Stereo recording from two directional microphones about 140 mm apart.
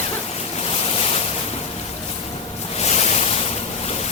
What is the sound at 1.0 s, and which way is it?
Boat, 45° left (ahead or behind).